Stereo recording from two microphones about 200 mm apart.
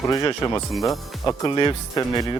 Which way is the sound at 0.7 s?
Centre (ahead or behind).